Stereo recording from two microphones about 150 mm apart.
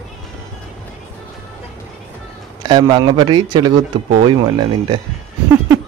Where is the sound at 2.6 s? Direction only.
30° right (ahead or behind).